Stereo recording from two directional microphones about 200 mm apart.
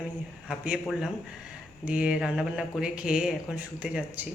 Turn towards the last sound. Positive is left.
turn(degrees=-5)  # may be behind; listen again after turning